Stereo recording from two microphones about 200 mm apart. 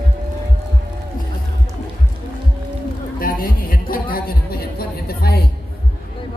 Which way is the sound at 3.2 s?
45° left (ahead or behind).